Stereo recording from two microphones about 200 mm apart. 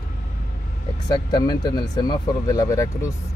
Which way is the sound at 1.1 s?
20° left (ahead or behind).